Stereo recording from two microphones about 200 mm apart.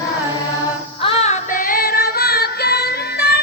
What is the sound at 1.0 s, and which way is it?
Female singing, 30° left (ahead or behind).